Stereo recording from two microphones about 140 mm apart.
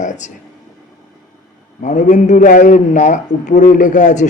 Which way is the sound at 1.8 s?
60° left (ahead or behind).